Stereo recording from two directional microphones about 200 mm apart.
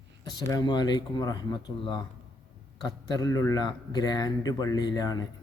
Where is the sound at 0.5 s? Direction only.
20° left (ahead or behind).